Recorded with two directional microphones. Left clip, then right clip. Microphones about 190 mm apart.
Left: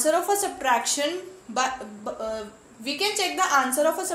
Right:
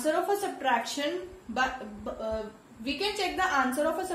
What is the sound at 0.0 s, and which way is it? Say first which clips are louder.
Speech: left 5 dB; 15° right (ahead or behind).